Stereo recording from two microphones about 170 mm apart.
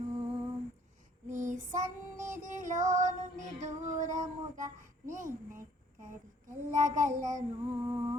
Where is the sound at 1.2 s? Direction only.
50° right (ahead or behind).